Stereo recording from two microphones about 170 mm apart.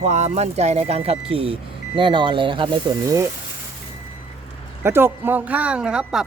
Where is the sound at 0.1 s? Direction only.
40° right (ahead or behind).